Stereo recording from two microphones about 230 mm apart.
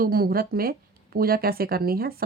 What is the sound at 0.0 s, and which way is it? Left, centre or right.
Speech, right.